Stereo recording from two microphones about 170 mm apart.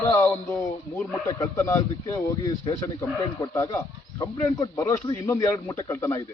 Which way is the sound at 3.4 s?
20° left (ahead or behind).